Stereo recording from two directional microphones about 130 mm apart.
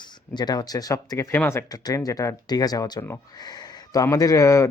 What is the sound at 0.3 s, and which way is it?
A man's voice, 30° left (ahead or behind).